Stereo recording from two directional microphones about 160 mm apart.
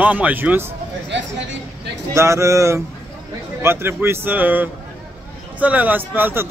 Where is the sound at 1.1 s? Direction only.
90° right.